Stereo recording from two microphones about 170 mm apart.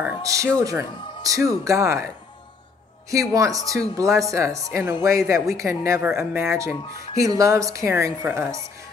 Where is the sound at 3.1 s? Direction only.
20° right (ahead or behind).